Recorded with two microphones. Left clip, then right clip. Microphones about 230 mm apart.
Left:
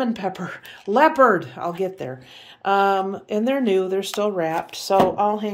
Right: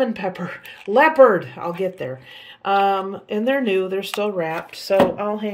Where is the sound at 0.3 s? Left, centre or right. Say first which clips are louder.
Right 2 dB; left.